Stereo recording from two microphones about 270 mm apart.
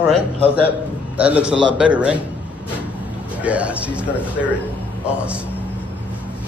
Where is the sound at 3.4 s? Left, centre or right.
Centre.